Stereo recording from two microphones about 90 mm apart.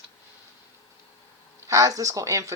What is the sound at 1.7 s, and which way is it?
Speech, 40° right (ahead or behind).